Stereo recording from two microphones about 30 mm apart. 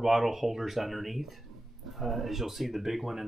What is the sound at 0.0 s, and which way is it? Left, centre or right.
Speech, centre.